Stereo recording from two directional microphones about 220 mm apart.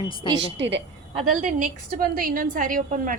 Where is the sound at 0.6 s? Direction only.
55° right (ahead or behind).